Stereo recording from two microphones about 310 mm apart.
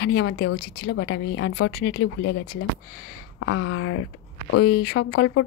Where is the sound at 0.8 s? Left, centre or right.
Left.